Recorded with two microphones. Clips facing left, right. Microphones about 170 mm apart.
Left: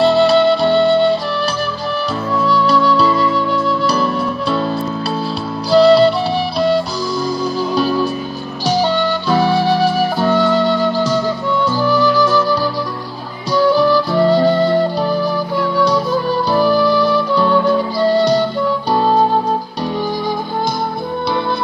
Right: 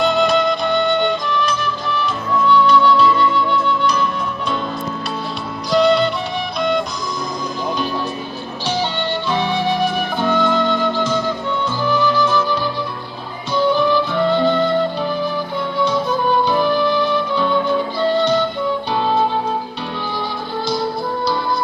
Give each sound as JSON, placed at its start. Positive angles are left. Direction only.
{"t": 0.0, "sound": "music", "side_deg": 35}
{"t": 5.7, "sound": "music", "side_deg": 35}
{"t": 13.5, "sound": "flute", "side_deg": 40}
{"t": 15.8, "sound": "music", "side_deg": 35}